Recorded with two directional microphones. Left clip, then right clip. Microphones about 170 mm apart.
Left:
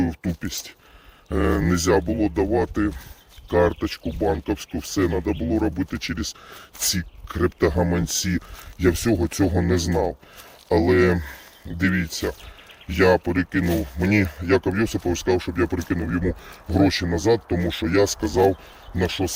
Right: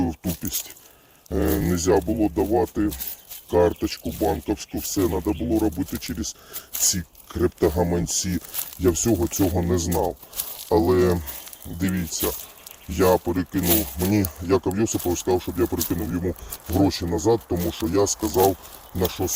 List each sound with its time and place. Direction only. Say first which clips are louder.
0.0 s speech: left 1 dB; 15° left (ahead or behind)